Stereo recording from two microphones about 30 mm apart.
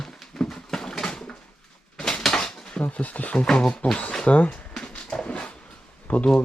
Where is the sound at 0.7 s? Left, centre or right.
Left.